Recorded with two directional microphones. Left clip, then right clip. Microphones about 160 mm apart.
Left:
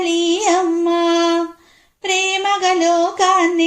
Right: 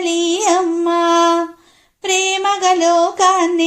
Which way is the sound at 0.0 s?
30° right (ahead or behind).